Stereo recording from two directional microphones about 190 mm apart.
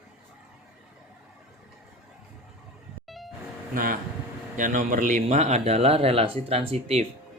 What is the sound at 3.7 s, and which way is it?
Speech, 45° right (ahead or behind).